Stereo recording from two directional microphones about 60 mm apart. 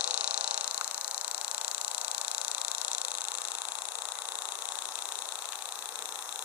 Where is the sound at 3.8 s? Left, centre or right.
Right.